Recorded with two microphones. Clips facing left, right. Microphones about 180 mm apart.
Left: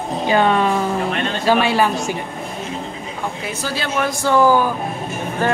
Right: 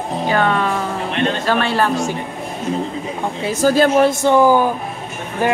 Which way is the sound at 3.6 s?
45° right (ahead or behind).